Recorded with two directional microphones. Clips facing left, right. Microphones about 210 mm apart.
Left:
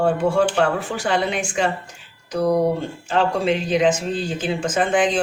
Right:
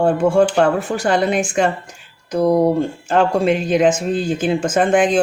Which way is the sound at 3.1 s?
50° right (ahead or behind).